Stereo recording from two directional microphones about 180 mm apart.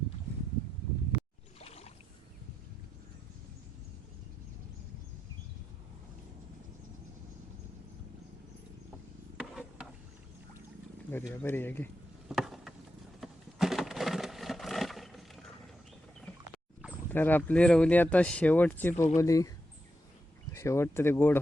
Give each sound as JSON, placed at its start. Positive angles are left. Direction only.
{"t": 1.5, "sound": "rowboat", "side_deg": 35}
{"t": 9.4, "sound": "a sound", "side_deg": -5}
{"t": 11.1, "sound": "speech", "side_deg": 15}
{"t": 12.3, "sound": "a sound", "side_deg": 0}
{"t": 17.1, "sound": "speech", "side_deg": 10}
{"t": 20.5, "sound": "speech", "side_deg": 15}